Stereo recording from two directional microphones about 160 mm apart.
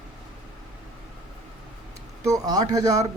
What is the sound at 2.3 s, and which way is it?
Speech, 25° right (ahead or behind).